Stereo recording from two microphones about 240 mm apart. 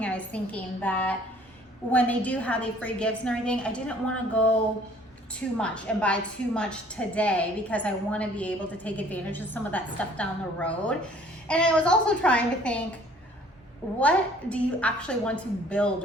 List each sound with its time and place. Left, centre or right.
0.0 s a woman's voice: centre
14.0 s a woman's voice: centre